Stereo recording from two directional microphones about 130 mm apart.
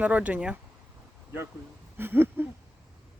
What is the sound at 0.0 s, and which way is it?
Speech, 10° right (ahead or behind).